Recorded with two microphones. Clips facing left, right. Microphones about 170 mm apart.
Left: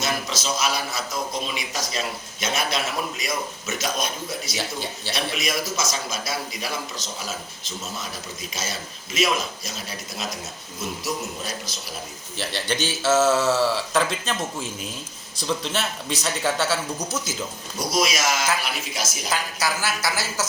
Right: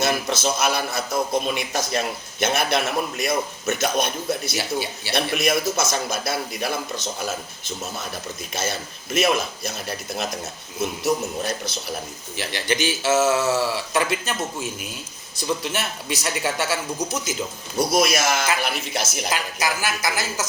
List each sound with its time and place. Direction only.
0.0 s a man's voice: 60° right (ahead or behind)
4.5 s speech: 10° right (ahead or behind)
5.1 s a man's voice: 60° right (ahead or behind)
12.4 s speech: 10° right (ahead or behind)
17.7 s a man's voice: 60° right (ahead or behind)
19.5 s speech: 15° right (ahead or behind)